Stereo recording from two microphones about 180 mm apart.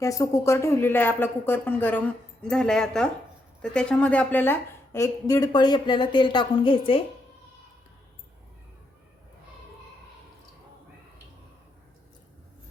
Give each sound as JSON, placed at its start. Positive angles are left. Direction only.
{"t": 0.0, "sound": "a woman's voice", "side_deg": 15}